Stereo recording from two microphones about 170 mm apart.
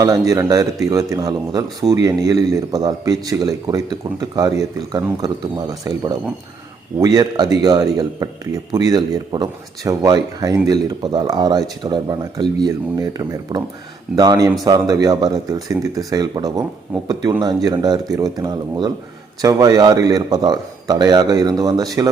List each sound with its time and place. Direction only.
0.0 s speech: 20° right (ahead or behind)